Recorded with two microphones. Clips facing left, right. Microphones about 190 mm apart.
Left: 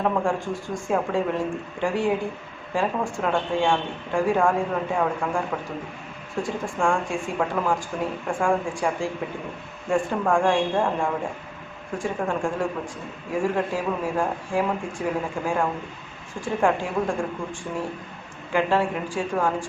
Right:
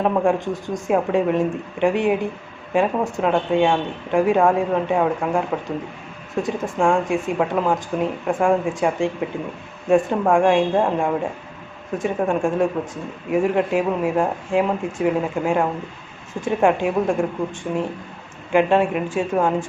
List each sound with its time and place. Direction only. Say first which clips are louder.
0.0 s speech: right 5 dB; 20° right (ahead or behind)